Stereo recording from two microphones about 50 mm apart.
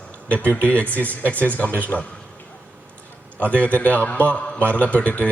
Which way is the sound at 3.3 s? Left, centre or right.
Left.